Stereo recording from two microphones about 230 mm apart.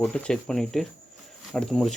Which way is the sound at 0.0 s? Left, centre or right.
Centre.